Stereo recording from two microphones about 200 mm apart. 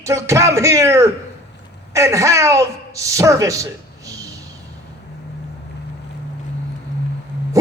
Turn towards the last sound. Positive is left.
turn(degrees=-15)  # may be behind; listen again after turning